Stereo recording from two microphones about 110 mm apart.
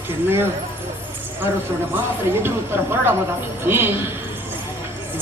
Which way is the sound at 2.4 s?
20° right (ahead or behind).